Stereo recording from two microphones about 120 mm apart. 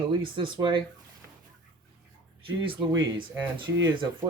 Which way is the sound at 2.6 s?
40° right (ahead or behind).